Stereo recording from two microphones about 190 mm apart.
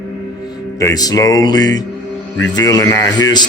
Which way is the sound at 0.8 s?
20° left (ahead or behind).